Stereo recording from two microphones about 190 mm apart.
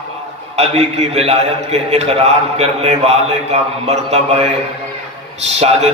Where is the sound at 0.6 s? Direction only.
35° right (ahead or behind).